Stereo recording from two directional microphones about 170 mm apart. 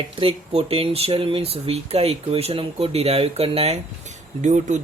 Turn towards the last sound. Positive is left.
turn(degrees=-45)  # may be behind; listen again after turning